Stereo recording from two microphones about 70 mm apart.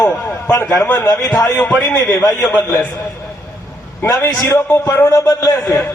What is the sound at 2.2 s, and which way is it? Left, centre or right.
Speech, left.